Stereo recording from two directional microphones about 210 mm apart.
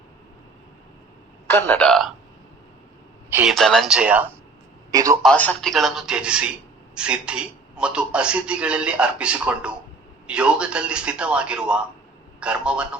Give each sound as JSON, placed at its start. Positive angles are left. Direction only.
{"t": 1.5, "sound": "a man's voice", "side_deg": 10}
{"t": 3.2, "sound": "a man's voice", "side_deg": -10}
{"t": 3.5, "sound": "a man's voice", "side_deg": 0}
{"t": 5.2, "sound": "a man's voice", "side_deg": 5}